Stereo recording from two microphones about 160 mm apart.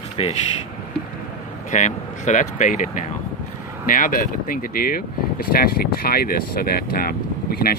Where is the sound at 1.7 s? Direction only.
50° left (ahead or behind).